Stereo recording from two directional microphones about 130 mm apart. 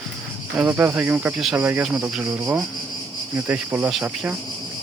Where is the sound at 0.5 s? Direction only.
15° right (ahead or behind).